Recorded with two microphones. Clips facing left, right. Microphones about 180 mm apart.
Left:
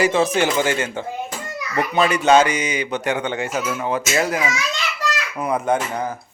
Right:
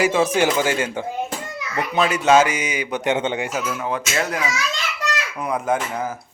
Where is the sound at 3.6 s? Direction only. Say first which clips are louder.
Left 2 dB; centre (ahead or behind).